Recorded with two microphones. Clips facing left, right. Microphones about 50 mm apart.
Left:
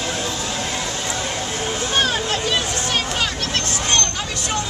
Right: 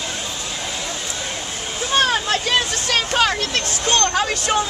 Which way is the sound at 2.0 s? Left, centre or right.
Right.